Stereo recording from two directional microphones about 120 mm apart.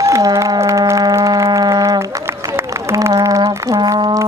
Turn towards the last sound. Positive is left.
turn(degrees=-30)  # may be behind; listen again after turning